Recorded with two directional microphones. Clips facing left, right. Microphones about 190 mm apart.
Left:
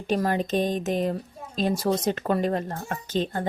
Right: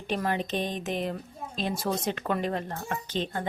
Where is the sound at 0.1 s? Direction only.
40° left (ahead or behind).